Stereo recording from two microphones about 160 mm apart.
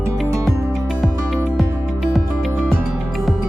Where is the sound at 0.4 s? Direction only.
Centre (ahead or behind).